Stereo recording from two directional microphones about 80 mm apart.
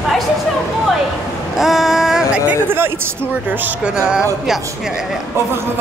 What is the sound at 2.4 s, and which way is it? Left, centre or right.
Speech, right.